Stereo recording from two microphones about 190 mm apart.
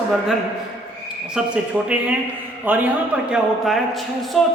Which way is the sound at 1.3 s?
5° right (ahead or behind).